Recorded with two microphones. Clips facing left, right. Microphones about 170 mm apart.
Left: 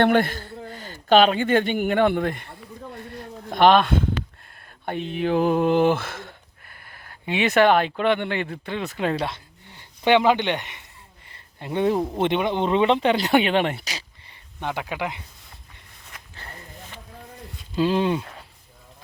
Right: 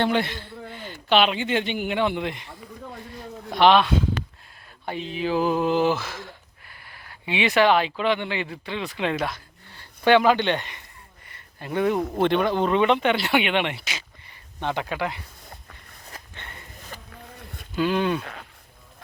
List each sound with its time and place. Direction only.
0.0 s speech: 50° left (ahead or behind)
9.2 s speech: 20° left (ahead or behind); by 14.0 s 40° left (ahead or behind)
14.6 s speech: 10° left (ahead or behind)
16.3 s a sound: 35° left (ahead or behind)
17.7 s speech: 30° left (ahead or behind)
18.2 s speech: 90° right